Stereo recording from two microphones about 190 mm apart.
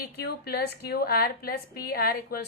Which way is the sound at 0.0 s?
55° left (ahead or behind).